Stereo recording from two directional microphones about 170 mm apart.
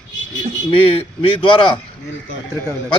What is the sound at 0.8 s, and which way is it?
Speech, 30° left (ahead or behind).